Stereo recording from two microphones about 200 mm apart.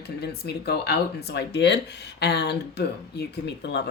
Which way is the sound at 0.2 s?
55° left (ahead or behind).